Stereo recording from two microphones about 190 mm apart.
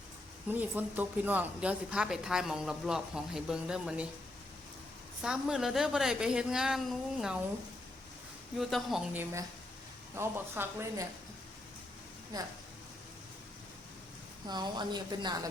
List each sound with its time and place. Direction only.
0.5 s speech: 10° right (ahead or behind)
5.2 s speech: centre (ahead or behind)
8.5 s speech: centre (ahead or behind)
12.3 s speech: 20° right (ahead or behind)
14.4 s speech: 20° right (ahead or behind)